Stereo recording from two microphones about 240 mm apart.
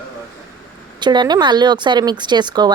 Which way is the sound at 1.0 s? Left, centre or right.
Centre.